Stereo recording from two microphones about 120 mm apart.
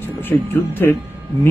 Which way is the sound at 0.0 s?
15° left (ahead or behind).